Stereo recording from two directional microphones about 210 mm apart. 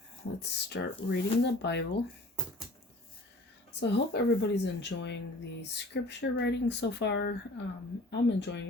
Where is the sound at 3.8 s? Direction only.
55° left (ahead or behind).